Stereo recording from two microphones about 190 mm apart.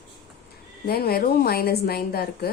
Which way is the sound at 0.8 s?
55° left (ahead or behind).